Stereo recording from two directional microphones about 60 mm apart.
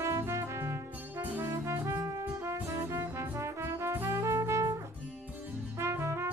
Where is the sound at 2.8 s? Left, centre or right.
Right.